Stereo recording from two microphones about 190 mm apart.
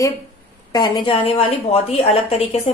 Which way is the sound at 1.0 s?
30° left (ahead or behind).